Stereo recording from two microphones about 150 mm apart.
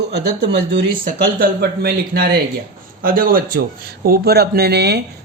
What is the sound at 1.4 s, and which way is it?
Speech, 90° right.